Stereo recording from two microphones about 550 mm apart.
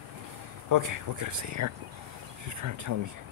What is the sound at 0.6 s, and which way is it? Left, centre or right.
Speech, right.